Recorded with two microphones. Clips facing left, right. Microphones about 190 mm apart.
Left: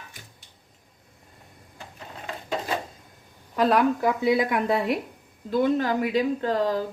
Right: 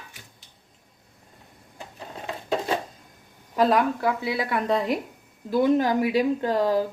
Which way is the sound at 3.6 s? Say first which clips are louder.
Even; centre (ahead or behind).